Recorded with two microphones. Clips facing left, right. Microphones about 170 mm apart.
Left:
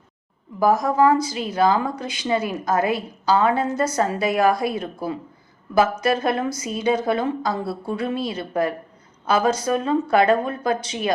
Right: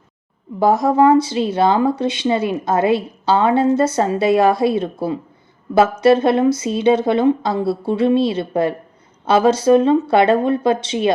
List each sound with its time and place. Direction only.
0.6 s speech: 25° right (ahead or behind)